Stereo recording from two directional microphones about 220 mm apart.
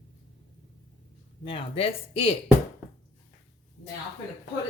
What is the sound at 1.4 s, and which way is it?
Speech, 25° left (ahead or behind).